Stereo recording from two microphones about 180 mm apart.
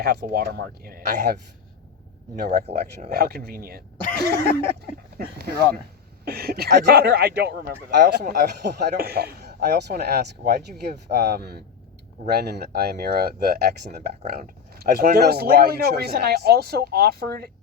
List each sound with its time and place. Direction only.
0.0 s a man's voice: 60° right (ahead or behind)
2.5 s speech: 35° right (ahead or behind)
3.1 s a man's voice: 60° right (ahead or behind)
7.9 s a man's voice: 55° right (ahead or behind)
14.8 s a man's voice: 55° right (ahead or behind)